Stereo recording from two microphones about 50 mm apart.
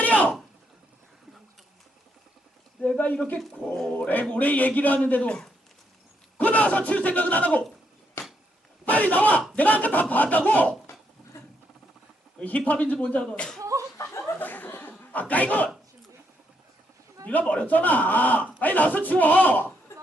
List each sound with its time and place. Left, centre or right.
0.0 s a sound: left
2.8 s a sound: left
3.9 s speech: left
6.3 s speech: left
8.8 s speech: left
12.4 s speech: left
13.7 s a sound: right
14.3 s chuckle: left
17.2 s speech: left